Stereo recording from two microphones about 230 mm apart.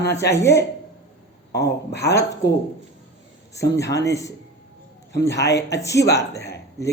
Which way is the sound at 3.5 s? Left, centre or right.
Centre.